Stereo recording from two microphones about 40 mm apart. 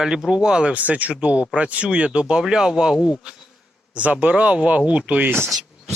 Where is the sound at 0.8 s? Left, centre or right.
Right; by 3.1 s centre.